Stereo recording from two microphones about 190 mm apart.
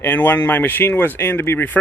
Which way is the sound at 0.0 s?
10° left (ahead or behind).